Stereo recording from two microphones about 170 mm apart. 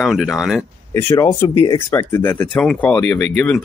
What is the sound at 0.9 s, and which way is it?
Speech, 15° left (ahead or behind).